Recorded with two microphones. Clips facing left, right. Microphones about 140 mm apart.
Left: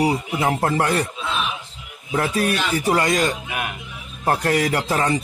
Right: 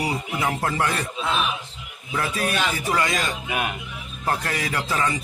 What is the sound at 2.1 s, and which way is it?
A man's voice, 40° left (ahead or behind).